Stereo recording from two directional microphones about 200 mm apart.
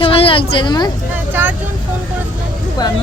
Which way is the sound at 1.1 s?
10° right (ahead or behind).